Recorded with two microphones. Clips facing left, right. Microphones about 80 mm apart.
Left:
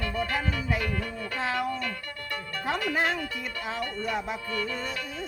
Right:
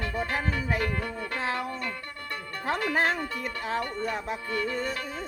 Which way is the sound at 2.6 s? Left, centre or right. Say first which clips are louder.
Right 1 dB; right.